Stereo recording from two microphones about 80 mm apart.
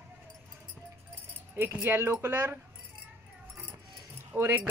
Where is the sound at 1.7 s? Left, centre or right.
Right.